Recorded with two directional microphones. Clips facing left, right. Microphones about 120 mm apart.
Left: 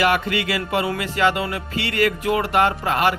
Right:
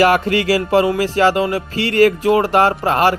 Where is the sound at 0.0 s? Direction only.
40° right (ahead or behind).